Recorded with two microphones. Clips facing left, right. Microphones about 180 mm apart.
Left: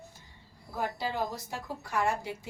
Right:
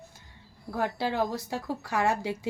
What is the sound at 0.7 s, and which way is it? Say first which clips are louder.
Speech: right 4 dB; 75° right (ahead or behind).